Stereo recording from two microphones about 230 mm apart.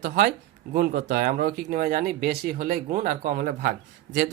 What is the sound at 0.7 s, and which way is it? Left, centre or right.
Speech, right.